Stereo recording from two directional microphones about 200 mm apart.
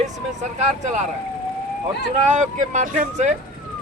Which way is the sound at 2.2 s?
35° right (ahead or behind).